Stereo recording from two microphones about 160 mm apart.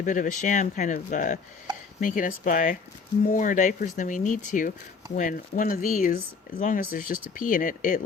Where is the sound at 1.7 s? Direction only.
25° right (ahead or behind).